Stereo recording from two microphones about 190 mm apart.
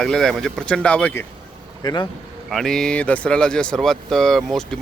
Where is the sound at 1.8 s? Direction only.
20° left (ahead or behind).